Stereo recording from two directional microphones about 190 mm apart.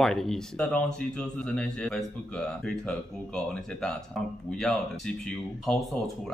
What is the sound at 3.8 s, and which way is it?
Speech, 5° left (ahead or behind).